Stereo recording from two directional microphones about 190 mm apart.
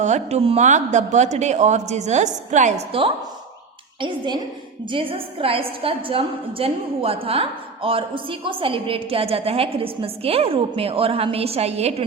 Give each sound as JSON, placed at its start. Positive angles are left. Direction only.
{"t": 0.0, "sound": "a woman's voice", "side_deg": -35}